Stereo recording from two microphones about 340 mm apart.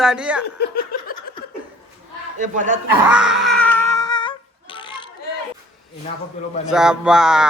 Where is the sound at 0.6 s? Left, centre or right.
Left.